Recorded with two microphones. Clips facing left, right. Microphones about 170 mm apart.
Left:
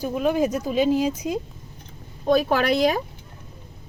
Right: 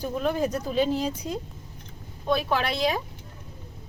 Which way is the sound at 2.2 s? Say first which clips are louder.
Left 6 dB; 40° left (ahead or behind).